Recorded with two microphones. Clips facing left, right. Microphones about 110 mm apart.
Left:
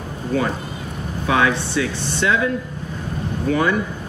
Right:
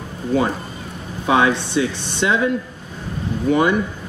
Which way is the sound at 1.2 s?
20° right (ahead or behind).